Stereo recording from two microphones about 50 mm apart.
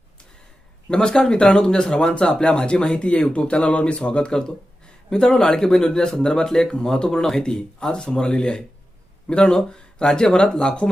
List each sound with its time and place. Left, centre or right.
0.9 s speech: centre